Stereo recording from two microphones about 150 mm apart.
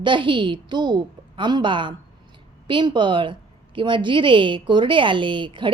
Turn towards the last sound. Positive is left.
turn(degrees=-35)  # may be behind; listen again after turning